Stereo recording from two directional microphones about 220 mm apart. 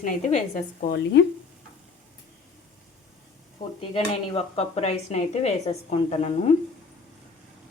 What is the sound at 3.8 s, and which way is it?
Speech, 25° left (ahead or behind).